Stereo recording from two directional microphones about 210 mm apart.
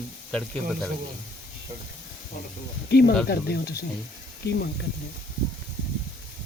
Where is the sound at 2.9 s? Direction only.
50° left (ahead or behind).